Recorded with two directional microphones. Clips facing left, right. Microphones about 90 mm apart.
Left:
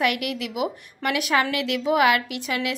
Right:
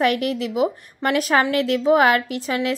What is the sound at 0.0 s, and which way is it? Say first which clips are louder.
A woman's voice: right 5 dB; 35° right (ahead or behind).